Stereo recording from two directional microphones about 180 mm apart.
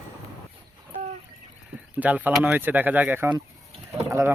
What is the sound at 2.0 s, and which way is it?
Speech, 10° right (ahead or behind).